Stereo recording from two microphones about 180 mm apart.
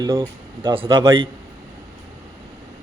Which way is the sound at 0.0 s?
20° right (ahead or behind).